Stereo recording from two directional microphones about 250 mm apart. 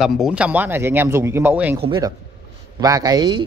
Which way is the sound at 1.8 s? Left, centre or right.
Centre.